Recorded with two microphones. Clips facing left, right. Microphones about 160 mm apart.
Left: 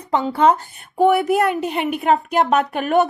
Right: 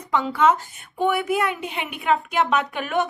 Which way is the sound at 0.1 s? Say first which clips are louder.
Left 3 dB; 30° left (ahead or behind).